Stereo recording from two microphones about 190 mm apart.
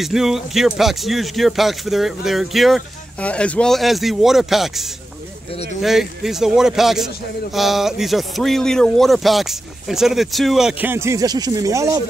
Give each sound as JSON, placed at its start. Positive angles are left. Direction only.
{"t": 0.0, "sound": "speech", "side_deg": 0}